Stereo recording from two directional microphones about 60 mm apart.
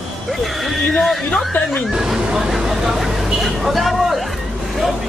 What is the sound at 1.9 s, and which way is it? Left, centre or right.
Speech, centre.